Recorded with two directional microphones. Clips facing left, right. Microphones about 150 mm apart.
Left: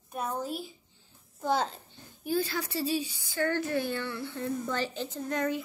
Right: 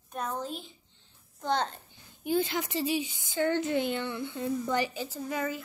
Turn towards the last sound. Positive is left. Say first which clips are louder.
# left 2 dB
turn(degrees=-5)  # may be behind; listen again after turning